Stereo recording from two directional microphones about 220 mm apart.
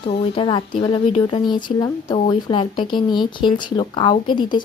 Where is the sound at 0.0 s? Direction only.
25° left (ahead or behind).